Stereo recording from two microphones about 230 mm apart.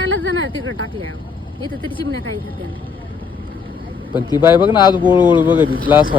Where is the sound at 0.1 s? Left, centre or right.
Right.